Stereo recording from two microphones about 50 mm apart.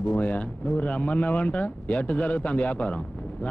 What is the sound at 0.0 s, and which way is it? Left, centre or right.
Speech, left.